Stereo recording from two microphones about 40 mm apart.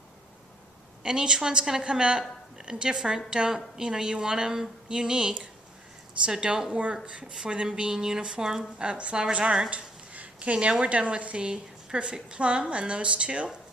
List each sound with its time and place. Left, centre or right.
1.0 s a woman's voice: centre
8.8 s a woman's voice: right
9.6 s a sound: right
10.8 s a woman's voice: right